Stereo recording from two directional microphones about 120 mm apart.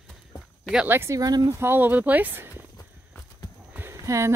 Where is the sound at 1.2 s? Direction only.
35° right (ahead or behind).